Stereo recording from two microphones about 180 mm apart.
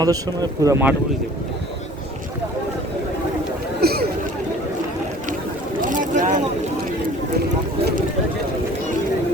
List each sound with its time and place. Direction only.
0.0 s speech: 20° right (ahead or behind)
3.8 s a sound: 60° right (ahead or behind)
5.8 s vehicle: 45° right (ahead or behind)